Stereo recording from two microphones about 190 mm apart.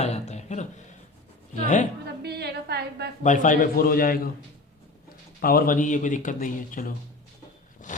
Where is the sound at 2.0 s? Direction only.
60° right (ahead or behind).